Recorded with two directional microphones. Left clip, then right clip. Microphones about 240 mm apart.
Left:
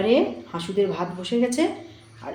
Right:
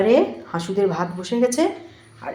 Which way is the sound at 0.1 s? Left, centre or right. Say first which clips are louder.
Right 3 dB; centre.